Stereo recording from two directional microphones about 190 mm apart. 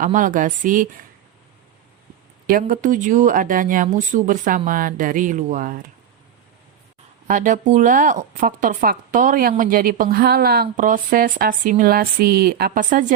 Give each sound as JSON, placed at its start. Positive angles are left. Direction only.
{"t": 0.0, "sound": "speech", "side_deg": -45}
{"t": 2.5, "sound": "speech", "side_deg": -45}
{"t": 7.3, "sound": "speech", "side_deg": -40}